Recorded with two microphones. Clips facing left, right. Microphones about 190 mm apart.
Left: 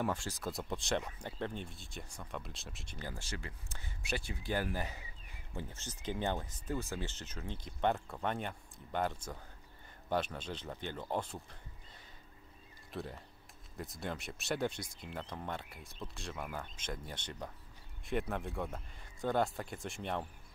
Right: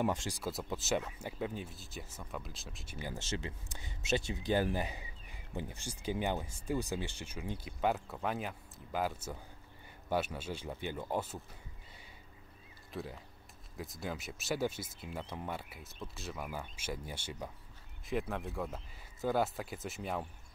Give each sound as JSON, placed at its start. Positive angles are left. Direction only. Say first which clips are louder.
{"t": 0.0, "sound": "speech", "louder": "right 3 dB", "side_deg": -20}
{"t": 0.4, "sound": "speech", "louder": "right 1 dB", "side_deg": -5}
{"t": 3.0, "sound": "speech", "louder": "right 4 dB", "side_deg": -20}
{"t": 12.9, "sound": "speech", "louder": "even", "side_deg": 0}